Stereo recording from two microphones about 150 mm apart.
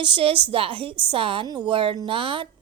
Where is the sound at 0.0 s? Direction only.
35° right (ahead or behind).